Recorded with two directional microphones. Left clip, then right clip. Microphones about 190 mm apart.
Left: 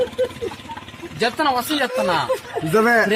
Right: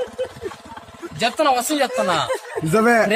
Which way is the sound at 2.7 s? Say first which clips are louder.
Even; 40° right (ahead or behind).